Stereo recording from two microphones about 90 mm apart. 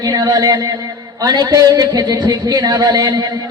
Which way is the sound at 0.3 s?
45° right (ahead or behind).